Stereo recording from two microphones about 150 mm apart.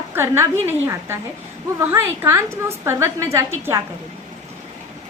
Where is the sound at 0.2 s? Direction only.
15° right (ahead or behind).